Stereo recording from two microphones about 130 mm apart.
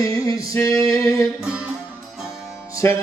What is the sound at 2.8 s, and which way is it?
Music, 20° left (ahead or behind).